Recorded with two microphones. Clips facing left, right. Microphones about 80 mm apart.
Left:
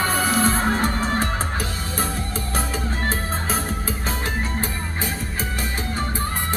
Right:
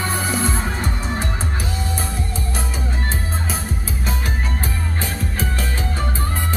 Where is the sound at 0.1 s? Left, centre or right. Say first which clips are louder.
Left 2 dB; left.